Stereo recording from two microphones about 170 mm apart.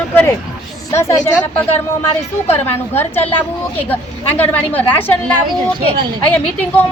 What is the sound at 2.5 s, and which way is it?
Speech, 10° left (ahead or behind).